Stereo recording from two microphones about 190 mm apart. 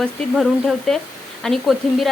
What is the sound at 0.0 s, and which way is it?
Speech, centre (ahead or behind).